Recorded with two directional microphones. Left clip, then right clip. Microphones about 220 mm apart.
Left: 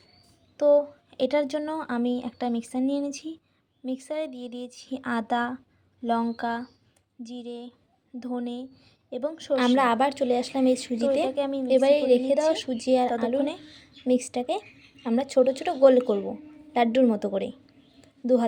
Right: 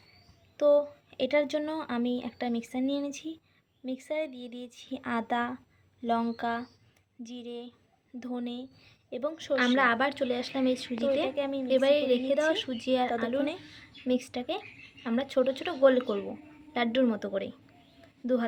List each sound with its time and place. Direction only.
0.5 s speech: 5° left (ahead or behind)
9.7 s a woman's voice: 20° left (ahead or behind)
11.3 s speech: 10° left (ahead or behind)
11.7 s a woman's voice: 20° left (ahead or behind)
14.0 s a woman's voice: 25° left (ahead or behind)
18.0 s a sound: 25° left (ahead or behind)